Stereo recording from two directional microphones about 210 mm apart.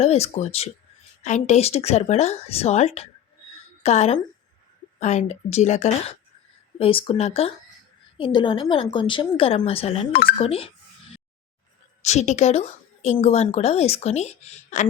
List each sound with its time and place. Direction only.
0.0 s a woman's voice: 30° left (ahead or behind)
12.0 s speech: 35° left (ahead or behind)